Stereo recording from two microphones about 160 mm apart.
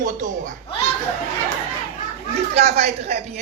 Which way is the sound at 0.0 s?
55° right (ahead or behind).